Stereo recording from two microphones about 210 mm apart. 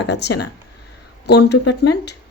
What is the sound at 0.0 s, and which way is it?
Speech, 55° left (ahead or behind).